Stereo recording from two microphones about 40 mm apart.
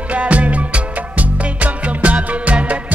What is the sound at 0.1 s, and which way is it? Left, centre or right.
Music, right.